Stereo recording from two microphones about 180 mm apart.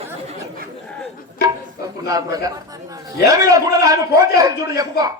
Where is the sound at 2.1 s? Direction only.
20° right (ahead or behind).